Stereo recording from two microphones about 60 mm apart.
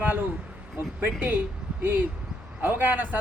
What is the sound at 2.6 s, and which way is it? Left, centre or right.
Speech, right.